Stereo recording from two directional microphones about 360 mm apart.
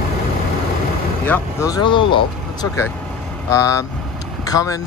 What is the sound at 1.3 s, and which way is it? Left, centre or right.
Speech, centre.